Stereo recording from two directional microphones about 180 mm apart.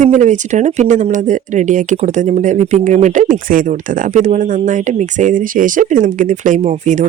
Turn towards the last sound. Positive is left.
turn(degrees=-40)  # may be behind; listen again after turning